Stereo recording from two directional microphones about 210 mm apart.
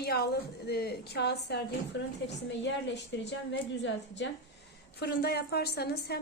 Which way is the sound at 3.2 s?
55° left (ahead or behind).